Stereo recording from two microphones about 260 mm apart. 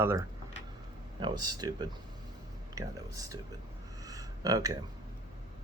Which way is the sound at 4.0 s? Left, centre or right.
Centre.